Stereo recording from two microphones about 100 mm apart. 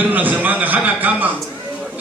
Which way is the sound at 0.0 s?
20° right (ahead or behind).